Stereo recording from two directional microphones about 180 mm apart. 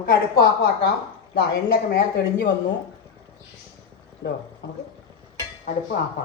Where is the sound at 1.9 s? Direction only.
65° left (ahead or behind).